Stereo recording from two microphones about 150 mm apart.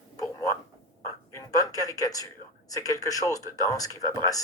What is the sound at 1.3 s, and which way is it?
A man's voice, 25° left (ahead or behind).